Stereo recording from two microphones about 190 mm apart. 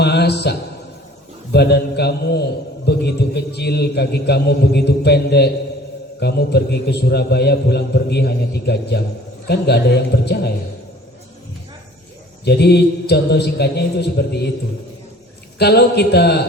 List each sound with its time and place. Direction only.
0.0 s a man's voice: 60° left (ahead or behind)
1.5 s a man's voice: 60° left (ahead or behind)
12.5 s a man's voice: 60° left (ahead or behind)
15.5 s a man's voice: 60° left (ahead or behind)